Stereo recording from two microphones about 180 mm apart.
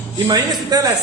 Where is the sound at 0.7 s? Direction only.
20° right (ahead or behind).